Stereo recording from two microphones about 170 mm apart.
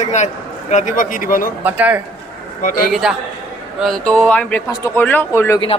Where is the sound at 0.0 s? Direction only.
45° left (ahead or behind).